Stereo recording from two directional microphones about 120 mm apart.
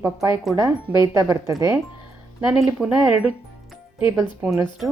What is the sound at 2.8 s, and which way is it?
Speech, 10° right (ahead or behind).